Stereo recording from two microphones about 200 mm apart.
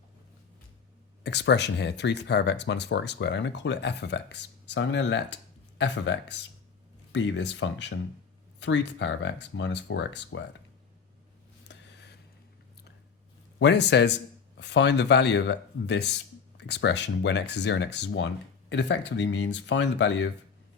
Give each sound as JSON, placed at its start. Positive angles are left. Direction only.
{"t": 1.2, "sound": "speech", "side_deg": 60}
{"t": 11.7, "sound": "a sound", "side_deg": 60}
{"t": 13.6, "sound": "speech", "side_deg": 60}